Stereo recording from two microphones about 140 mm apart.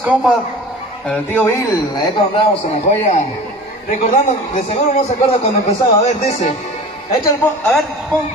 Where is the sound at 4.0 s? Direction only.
65° left (ahead or behind).